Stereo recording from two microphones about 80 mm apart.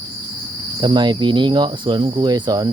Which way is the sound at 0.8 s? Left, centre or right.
Right.